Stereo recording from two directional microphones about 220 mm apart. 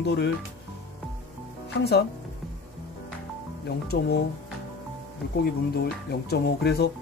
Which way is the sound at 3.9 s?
45° left (ahead or behind).